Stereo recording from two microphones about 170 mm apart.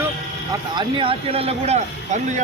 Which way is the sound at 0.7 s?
30° right (ahead or behind).